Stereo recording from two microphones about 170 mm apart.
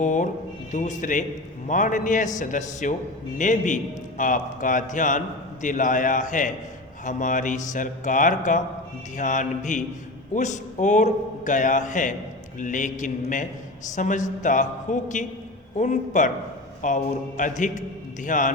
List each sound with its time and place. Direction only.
0.0 s a man's voice: 45° left (ahead or behind)